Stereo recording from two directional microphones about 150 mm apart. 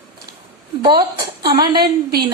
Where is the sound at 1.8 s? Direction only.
90° right.